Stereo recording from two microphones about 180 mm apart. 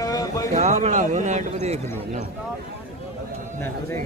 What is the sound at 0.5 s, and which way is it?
A man's voice, 40° right (ahead or behind).